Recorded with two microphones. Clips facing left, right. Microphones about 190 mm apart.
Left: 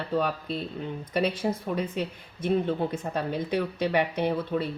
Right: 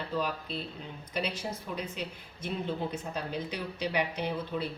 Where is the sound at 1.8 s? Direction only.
50° left (ahead or behind).